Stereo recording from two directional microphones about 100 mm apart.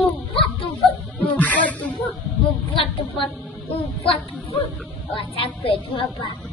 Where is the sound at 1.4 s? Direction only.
15° left (ahead or behind).